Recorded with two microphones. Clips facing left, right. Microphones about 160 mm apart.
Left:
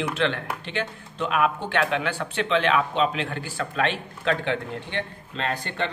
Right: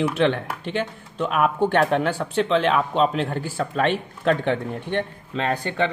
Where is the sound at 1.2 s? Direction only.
45° right (ahead or behind).